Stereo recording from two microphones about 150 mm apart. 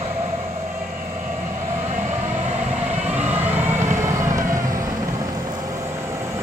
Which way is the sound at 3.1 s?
10° right (ahead or behind).